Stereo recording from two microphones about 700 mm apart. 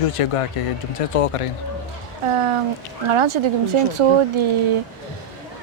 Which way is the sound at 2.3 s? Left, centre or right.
Right.